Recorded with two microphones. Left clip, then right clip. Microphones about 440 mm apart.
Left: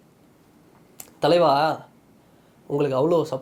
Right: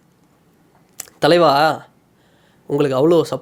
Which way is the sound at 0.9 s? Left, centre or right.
Right.